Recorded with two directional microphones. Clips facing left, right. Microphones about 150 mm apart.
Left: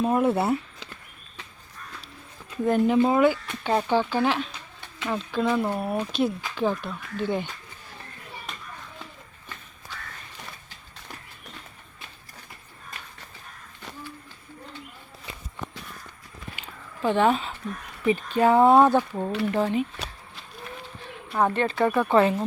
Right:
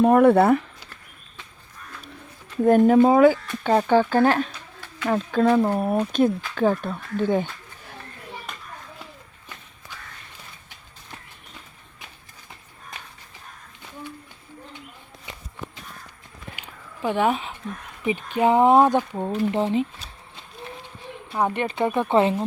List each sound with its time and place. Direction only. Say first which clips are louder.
0.0 s speech: right 7 dB; 60° right (ahead or behind)
2.6 s speech: right 6 dB; 50° right (ahead or behind)
5.6 s speech: right 5 dB; 20° right (ahead or behind)
6.6 s speech: right 4 dB; 50° right (ahead or behind)
16.6 s a sound: left 1 dB; 10° right (ahead or behind)
18.0 s speech: even; 15° right (ahead or behind)
21.3 s speech: left 1 dB; 15° right (ahead or behind)